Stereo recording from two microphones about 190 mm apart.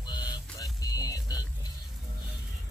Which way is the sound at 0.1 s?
20° left (ahead or behind).